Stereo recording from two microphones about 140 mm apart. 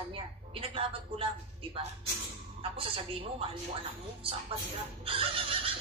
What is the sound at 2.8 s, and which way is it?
Speech, 45° right (ahead or behind).